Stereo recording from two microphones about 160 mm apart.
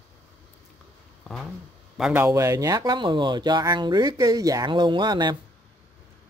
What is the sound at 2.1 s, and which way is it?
Speech, 20° right (ahead or behind).